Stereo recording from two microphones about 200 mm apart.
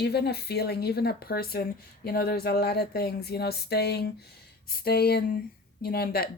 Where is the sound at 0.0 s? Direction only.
55° left (ahead or behind).